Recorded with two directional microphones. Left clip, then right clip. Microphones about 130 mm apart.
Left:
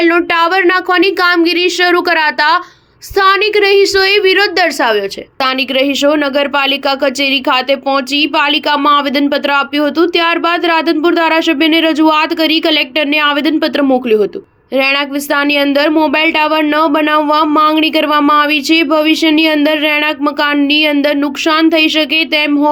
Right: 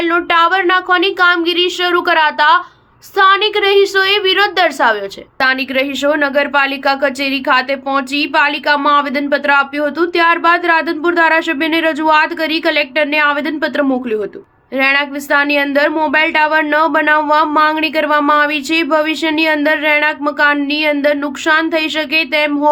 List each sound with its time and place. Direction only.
0.0 s a woman's voice: 35° left (ahead or behind)